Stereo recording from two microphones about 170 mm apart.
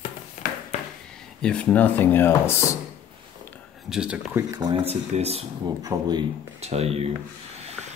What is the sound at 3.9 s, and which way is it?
Speech, 5° right (ahead or behind).